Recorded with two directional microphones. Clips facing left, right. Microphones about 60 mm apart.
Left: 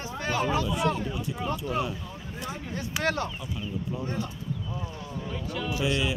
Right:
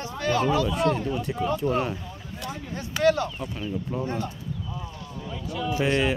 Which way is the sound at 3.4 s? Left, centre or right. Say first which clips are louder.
Right 3 dB; right.